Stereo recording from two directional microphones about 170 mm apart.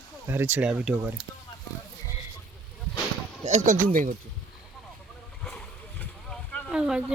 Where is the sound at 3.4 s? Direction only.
45° right (ahead or behind).